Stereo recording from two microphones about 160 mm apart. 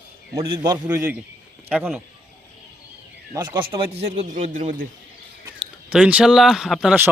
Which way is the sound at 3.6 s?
35° right (ahead or behind).